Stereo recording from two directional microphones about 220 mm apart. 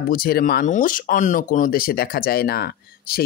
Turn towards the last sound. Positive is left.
turn(degrees=45)  # may be behind; listen again after turning